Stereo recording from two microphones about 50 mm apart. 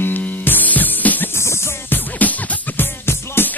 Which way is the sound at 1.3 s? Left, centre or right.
Left.